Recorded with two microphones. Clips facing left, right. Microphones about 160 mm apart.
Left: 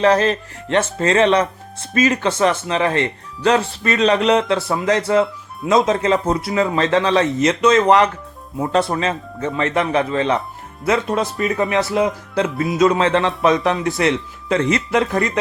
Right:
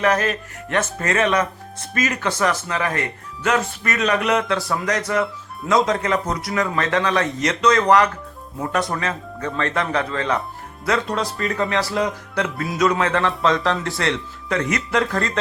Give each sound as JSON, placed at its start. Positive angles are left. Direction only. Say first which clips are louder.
{"t": 0.0, "sound": "speech", "louder": "left 5 dB", "side_deg": 30}